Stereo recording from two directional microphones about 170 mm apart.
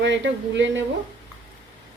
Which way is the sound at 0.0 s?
90° right.